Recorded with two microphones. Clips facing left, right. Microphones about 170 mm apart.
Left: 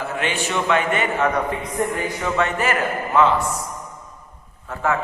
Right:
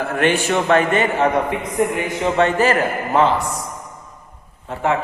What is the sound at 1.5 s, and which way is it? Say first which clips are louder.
A man's voice: right 4 dB; 20° right (ahead or behind).